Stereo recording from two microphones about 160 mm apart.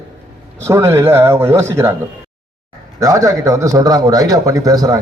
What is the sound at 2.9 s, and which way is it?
A man's voice, 20° right (ahead or behind).